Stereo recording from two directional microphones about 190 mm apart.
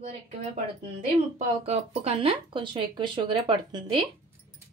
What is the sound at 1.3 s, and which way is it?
Speech, 35° right (ahead or behind).